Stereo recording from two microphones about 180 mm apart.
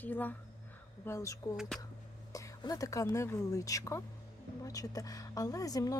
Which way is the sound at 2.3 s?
20° left (ahead or behind).